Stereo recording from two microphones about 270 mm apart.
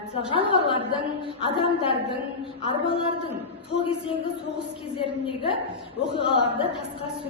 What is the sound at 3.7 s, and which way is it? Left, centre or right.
A woman's voice, centre.